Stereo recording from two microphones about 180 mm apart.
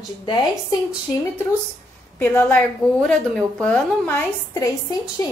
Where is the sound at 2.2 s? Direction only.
10° left (ahead or behind).